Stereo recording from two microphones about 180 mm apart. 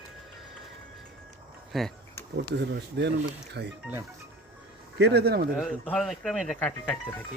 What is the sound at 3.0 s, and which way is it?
Speech, 70° right (ahead or behind).